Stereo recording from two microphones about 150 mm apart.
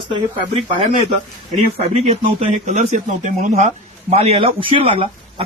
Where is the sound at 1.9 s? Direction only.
45° right (ahead or behind).